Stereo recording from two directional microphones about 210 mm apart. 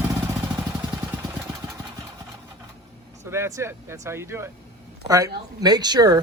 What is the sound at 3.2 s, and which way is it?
Speech, 15° right (ahead or behind).